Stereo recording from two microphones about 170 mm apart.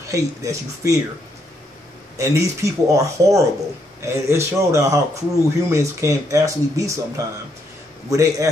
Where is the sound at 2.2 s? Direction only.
20° right (ahead or behind).